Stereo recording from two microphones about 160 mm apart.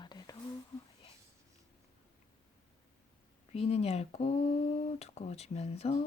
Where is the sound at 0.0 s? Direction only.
25° left (ahead or behind).